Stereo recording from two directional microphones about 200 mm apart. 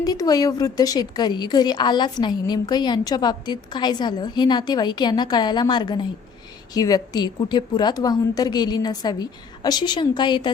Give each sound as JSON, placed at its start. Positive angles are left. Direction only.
{"t": 0.0, "sound": "a woman's voice", "side_deg": 20}